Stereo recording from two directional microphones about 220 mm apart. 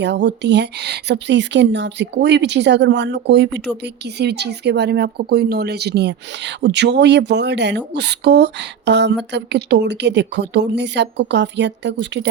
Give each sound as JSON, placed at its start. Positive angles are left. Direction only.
{"t": 0.0, "sound": "speech", "side_deg": -55}